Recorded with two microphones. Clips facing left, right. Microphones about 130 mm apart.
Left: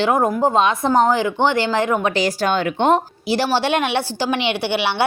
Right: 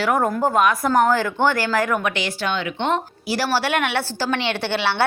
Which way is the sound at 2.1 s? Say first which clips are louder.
Left 6 dB; 40° left (ahead or behind).